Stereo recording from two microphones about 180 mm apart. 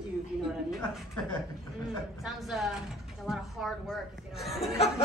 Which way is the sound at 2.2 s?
Centre (ahead or behind).